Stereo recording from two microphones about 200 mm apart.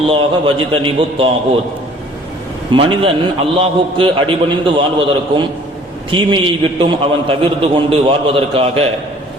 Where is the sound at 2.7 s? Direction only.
25° right (ahead or behind).